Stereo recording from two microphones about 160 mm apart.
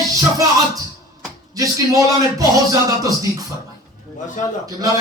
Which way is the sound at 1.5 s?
20° right (ahead or behind).